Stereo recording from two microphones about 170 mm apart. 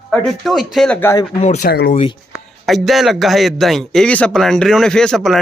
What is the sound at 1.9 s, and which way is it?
Speech, 35° left (ahead or behind).